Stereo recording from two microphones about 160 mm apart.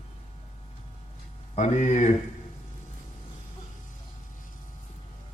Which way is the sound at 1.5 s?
45° left (ahead or behind).